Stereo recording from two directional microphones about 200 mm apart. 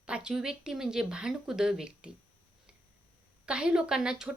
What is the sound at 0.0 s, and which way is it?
Speech, 5° right (ahead or behind).